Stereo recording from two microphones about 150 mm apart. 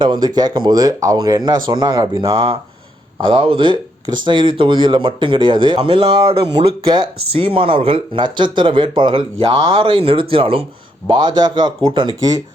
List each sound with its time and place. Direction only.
0.0 s speech: 30° right (ahead or behind)